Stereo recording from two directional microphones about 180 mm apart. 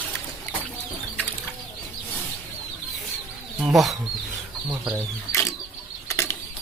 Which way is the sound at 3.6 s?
Centre (ahead or behind).